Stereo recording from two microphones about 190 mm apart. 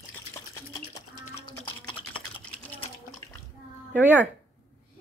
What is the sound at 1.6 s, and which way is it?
Typing, 25° left (ahead or behind).